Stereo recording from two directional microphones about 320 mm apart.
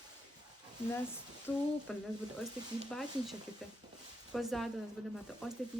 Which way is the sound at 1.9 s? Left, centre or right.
Centre.